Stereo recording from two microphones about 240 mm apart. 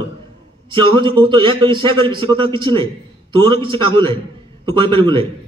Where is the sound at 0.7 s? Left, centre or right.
Centre.